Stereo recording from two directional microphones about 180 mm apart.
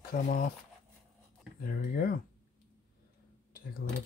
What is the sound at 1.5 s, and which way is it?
Speech, 55° left (ahead or behind).